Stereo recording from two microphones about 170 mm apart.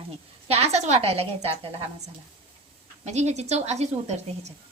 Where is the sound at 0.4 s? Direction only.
35° right (ahead or behind).